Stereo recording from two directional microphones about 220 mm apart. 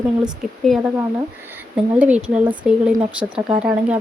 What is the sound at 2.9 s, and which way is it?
Speech, 20° right (ahead or behind).